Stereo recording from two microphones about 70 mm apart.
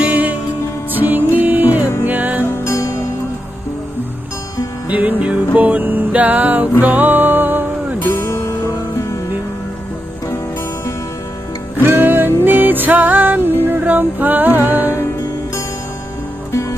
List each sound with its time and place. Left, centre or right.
0.0 s music: right
2.5 s music: left
4.9 s music: right
11.8 s music: right